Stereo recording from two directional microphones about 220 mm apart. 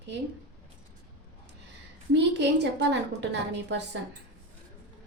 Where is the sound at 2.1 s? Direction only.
50° right (ahead or behind).